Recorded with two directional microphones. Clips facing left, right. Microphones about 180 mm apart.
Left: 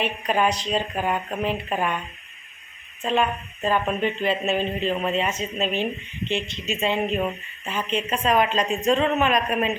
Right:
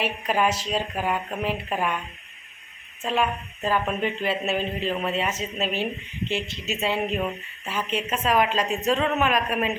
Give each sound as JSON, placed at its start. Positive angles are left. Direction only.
{"t": 0.0, "sound": "speech", "side_deg": -5}
{"t": 3.0, "sound": "speech", "side_deg": -5}